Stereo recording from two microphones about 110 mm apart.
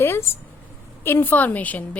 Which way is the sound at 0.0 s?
20° left (ahead or behind).